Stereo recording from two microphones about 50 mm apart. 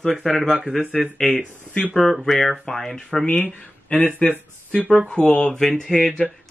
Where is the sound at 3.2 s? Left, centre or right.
Left.